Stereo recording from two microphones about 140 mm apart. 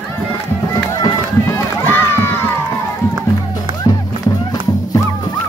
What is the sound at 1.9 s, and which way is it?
Run, 15° left (ahead or behind).